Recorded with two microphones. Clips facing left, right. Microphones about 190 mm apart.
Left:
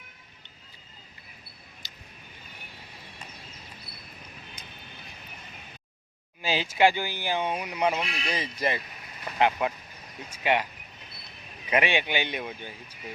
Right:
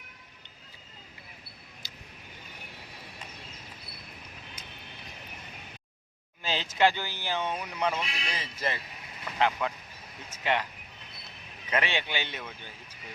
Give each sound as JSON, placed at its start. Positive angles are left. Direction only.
{"t": 1.8, "sound": "vehicle", "side_deg": -10}
{"t": 6.4, "sound": "speech", "side_deg": 10}
{"t": 11.7, "sound": "speech", "side_deg": 15}